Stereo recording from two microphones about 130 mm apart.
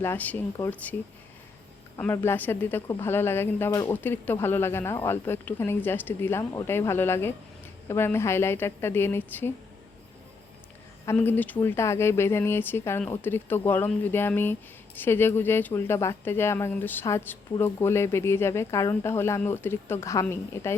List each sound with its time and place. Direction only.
0.0 s a woman's voice: 15° left (ahead or behind)
2.0 s a woman's voice: 15° left (ahead or behind)
11.0 s a woman's voice: 20° left (ahead or behind)